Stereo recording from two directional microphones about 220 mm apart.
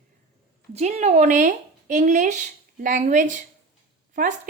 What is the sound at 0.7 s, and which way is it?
Speech, 30° right (ahead or behind).